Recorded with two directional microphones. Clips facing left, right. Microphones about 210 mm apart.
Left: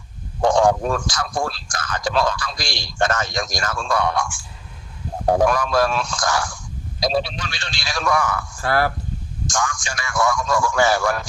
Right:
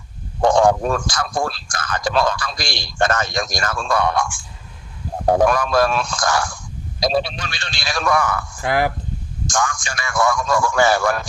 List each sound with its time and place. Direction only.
0.4 s a man's voice: 55° right (ahead or behind)
8.6 s speech: 15° right (ahead or behind)
9.5 s a man's voice: 55° right (ahead or behind)